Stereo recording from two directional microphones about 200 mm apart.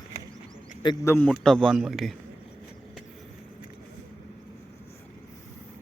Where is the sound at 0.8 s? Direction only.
20° left (ahead or behind).